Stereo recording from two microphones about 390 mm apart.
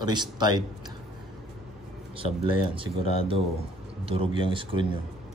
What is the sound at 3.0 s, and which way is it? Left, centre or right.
Speech, centre.